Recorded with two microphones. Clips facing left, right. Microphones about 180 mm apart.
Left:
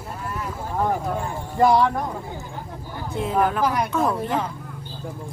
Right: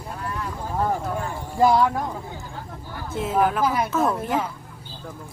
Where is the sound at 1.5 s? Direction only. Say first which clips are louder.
Left 1 dB; centre (ahead or behind).